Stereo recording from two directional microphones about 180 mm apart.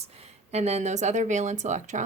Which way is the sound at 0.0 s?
35° right (ahead or behind).